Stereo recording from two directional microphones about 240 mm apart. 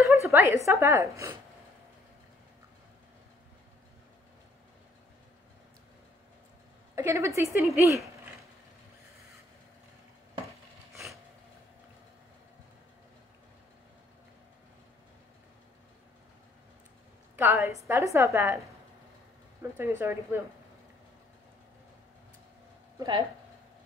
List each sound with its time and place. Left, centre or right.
0.0 s a sound: centre
0.7 s a woman's voice: centre
7.0 s a woman's voice: centre
17.4 s a woman's voice: centre
19.6 s a woman's voice: centre
22.9 s speech: centre